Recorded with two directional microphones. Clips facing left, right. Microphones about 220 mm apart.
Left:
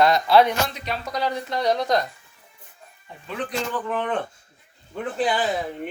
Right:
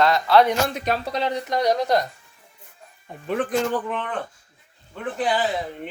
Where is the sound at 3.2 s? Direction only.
50° right (ahead or behind).